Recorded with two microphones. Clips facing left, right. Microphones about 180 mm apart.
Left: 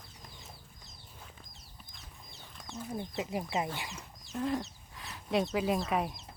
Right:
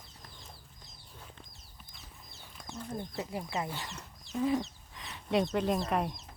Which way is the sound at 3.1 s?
20° left (ahead or behind).